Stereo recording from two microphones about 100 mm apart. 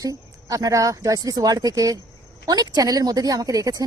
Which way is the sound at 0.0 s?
35° right (ahead or behind).